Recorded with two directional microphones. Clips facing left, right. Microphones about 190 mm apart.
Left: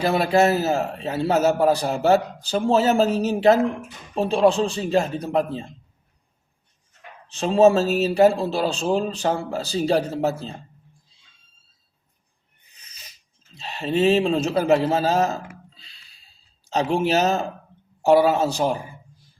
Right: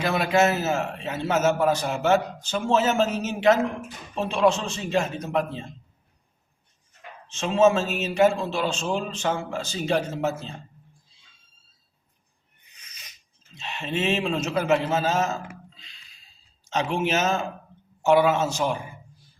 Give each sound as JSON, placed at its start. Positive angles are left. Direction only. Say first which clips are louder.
{"t": 0.0, "sound": "a man's voice", "louder": "left 3 dB", "side_deg": 35}
{"t": 7.3, "sound": "a man's voice", "louder": "left 4 dB", "side_deg": 35}
{"t": 12.7, "sound": "a sound", "louder": "left 1 dB", "side_deg": 30}
{"t": 16.6, "sound": "a man's voice", "louder": "left 4 dB", "side_deg": 35}